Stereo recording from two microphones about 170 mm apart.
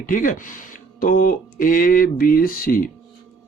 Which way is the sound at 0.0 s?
50° left (ahead or behind).